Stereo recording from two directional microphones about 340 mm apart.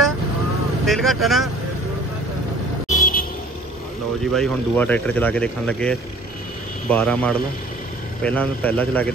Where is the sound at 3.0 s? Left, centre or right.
Left.